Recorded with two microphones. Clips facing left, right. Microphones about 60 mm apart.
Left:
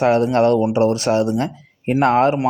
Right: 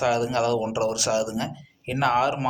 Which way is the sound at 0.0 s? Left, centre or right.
Left.